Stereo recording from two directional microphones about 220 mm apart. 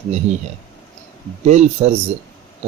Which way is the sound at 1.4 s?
30° right (ahead or behind).